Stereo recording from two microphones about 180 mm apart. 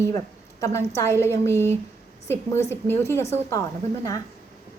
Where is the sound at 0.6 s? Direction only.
15° left (ahead or behind).